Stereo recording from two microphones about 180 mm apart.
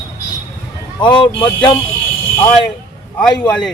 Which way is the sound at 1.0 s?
25° left (ahead or behind).